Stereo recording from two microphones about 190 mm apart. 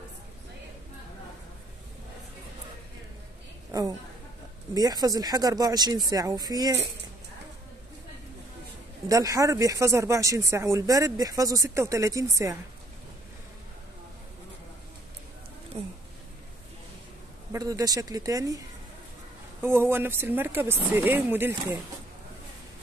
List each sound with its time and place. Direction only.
3.7 s speech: 20° right (ahead or behind)
9.1 s speech: 15° right (ahead or behind)
15.7 s speech: 35° right (ahead or behind)
17.5 s speech: 20° right (ahead or behind)
19.6 s speech: 10° right (ahead or behind)